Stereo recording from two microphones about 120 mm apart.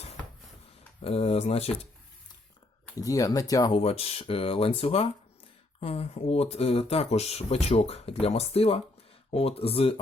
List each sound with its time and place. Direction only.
1.0 s speech: 55° left (ahead or behind)
3.0 s speech: 30° left (ahead or behind)
3.7 s speech: 50° left (ahead or behind)